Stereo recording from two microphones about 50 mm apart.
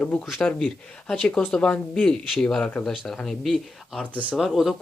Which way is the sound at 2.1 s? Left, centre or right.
Centre.